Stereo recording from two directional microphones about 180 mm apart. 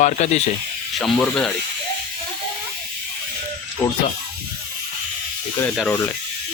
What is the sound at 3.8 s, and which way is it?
Speech, 10° left (ahead or behind).